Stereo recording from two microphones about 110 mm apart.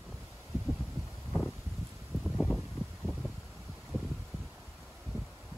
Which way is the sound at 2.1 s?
20° right (ahead or behind).